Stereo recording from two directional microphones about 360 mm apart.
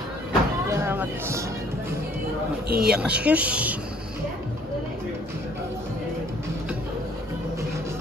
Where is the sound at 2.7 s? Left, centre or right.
Right.